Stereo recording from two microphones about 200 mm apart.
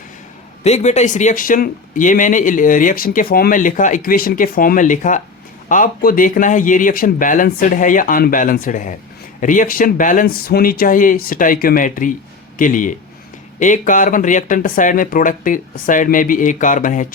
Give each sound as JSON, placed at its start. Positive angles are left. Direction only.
{"t": 0.6, "sound": "speech", "side_deg": 35}